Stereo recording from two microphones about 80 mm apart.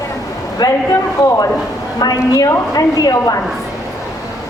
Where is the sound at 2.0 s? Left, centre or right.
Left.